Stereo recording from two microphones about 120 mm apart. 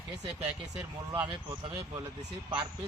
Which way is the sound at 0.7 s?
15° right (ahead or behind).